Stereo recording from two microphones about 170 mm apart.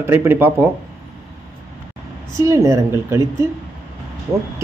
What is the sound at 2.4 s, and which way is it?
Speech, 15° right (ahead or behind).